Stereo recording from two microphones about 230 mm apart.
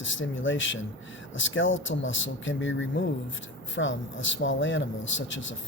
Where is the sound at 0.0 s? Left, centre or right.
Left.